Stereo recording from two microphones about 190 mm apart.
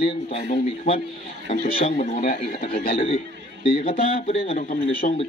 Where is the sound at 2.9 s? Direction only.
30° left (ahead or behind).